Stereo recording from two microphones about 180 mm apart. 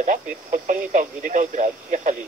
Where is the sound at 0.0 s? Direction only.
45° right (ahead or behind).